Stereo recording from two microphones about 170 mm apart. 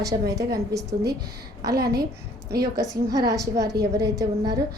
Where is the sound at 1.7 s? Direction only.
70° right (ahead or behind).